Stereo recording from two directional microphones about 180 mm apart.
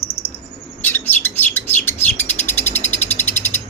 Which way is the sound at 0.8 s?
10° left (ahead or behind).